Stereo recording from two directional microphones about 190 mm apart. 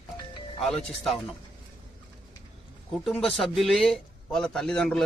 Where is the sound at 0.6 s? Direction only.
5° left (ahead or behind).